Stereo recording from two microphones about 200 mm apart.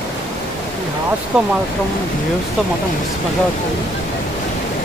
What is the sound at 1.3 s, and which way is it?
Speech, 5° right (ahead or behind).